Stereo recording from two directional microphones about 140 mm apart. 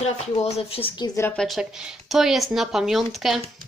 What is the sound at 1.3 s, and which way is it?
Speech, centre (ahead or behind).